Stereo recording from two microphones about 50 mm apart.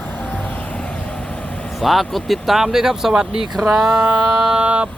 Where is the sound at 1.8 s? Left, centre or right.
Centre.